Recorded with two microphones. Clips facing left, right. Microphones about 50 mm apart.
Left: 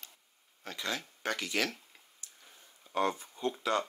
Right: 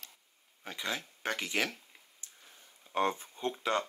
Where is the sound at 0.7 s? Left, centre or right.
Centre.